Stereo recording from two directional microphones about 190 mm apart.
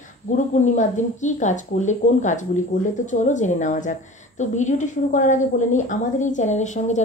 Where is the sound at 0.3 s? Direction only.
40° left (ahead or behind).